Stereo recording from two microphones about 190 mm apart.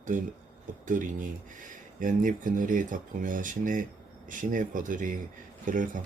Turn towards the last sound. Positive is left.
turn(degrees=-45)  # may be behind; listen again after turning